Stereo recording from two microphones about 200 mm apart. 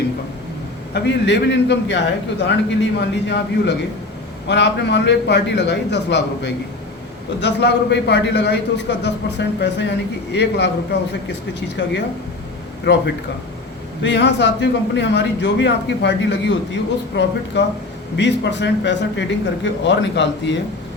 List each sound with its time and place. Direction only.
0.9 s a man's voice: 60° left (ahead or behind)
12.9 s a man's voice: 60° left (ahead or behind)